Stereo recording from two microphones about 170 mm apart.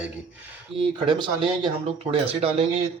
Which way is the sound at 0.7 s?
25° right (ahead or behind).